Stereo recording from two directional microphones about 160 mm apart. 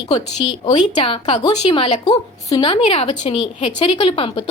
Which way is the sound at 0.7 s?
30° left (ahead or behind).